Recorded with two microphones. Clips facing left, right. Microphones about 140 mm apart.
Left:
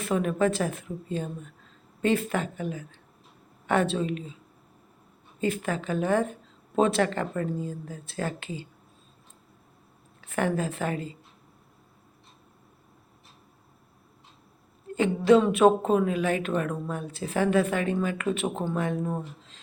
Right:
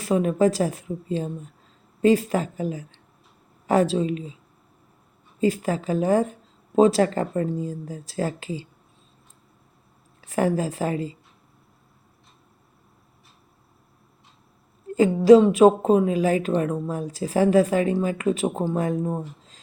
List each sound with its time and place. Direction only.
0.0 s speech: 25° right (ahead or behind)
2.0 s a woman's voice: 35° right (ahead or behind)
3.9 s speech: 20° right (ahead or behind)
5.4 s a woman's voice: 35° right (ahead or behind)
10.2 s a woman's voice: 35° right (ahead or behind)
14.9 s a woman's voice: 35° right (ahead or behind)
16.9 s a woman's voice: 35° right (ahead or behind)
18.9 s speech: 25° right (ahead or behind)